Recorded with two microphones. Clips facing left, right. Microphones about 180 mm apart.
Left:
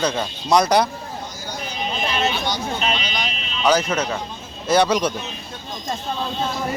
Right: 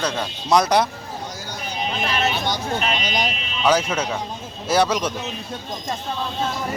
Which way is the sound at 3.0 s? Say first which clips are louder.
Right 3 dB; 40° right (ahead or behind).